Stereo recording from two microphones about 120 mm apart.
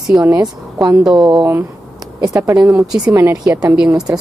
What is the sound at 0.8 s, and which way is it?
Speech, centre (ahead or behind).